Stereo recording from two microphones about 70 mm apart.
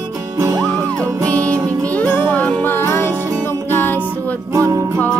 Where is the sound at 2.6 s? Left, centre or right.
Left.